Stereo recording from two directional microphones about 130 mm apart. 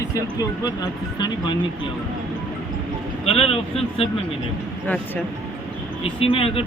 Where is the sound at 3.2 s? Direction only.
50° left (ahead or behind).